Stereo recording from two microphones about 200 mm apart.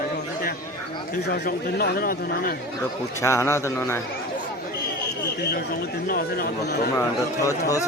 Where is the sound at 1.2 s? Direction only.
50° left (ahead or behind).